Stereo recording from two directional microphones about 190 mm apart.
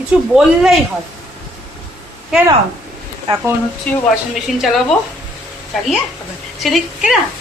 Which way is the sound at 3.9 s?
5° left (ahead or behind).